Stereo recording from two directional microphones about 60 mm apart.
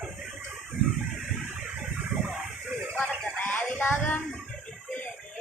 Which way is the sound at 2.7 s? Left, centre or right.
Right.